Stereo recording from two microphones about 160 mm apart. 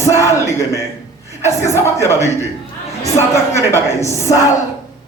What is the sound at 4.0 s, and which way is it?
Speech, 15° left (ahead or behind).